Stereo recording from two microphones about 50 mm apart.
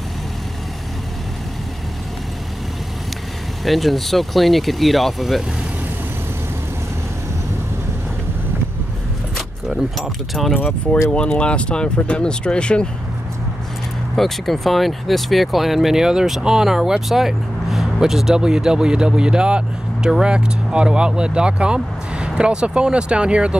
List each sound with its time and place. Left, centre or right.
3.6 s speech: centre
9.7 s speech: centre
10.5 s speech: left
14.1 s speech: centre; by 23.6 s right